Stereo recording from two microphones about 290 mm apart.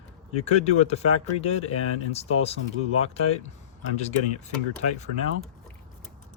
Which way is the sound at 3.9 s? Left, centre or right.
Left.